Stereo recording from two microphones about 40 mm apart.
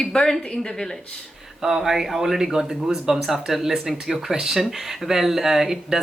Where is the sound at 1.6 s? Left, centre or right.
Centre.